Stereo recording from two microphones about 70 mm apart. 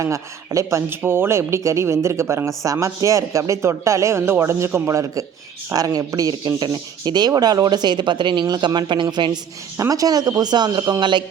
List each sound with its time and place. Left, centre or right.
0.0 s speech: right
0.9 s speech: right
5.7 s speech: right
9.7 s speech: right